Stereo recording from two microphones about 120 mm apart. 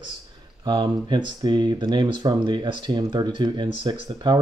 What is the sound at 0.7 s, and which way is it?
Speech, 40° right (ahead or behind).